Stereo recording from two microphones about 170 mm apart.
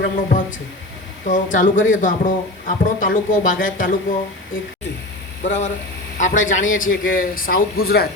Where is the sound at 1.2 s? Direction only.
50° left (ahead or behind).